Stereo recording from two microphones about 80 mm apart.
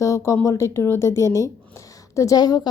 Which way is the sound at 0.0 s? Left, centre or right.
Left.